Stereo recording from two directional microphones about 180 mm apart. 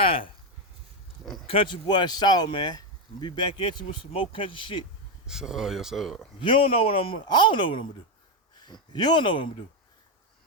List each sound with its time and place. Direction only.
0.0 s a sound: 30° left (ahead or behind)
1.2 s oink: centre (ahead or behind)
1.5 s speech: 30° left (ahead or behind)
5.2 s speech: 5° right (ahead or behind)
6.4 s speech: 30° left (ahead or behind)